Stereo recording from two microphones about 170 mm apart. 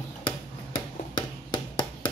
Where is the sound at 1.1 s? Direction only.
25° left (ahead or behind).